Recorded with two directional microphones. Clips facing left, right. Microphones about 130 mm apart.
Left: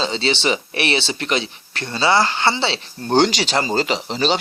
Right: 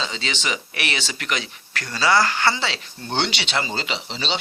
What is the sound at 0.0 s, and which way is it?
Speech, 30° left (ahead or behind).